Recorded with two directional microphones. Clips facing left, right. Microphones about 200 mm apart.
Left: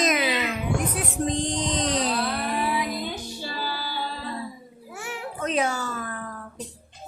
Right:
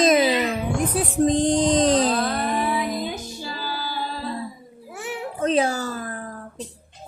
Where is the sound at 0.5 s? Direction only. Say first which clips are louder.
Right 3 dB; 35° right (ahead or behind).